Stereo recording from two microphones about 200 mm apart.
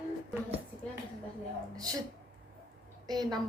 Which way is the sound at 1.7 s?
20° right (ahead or behind).